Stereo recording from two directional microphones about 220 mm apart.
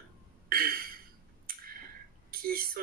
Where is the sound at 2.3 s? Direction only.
40° right (ahead or behind).